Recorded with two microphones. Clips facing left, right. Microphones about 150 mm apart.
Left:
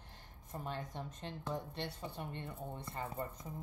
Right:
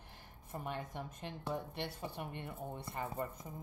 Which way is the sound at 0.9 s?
10° right (ahead or behind).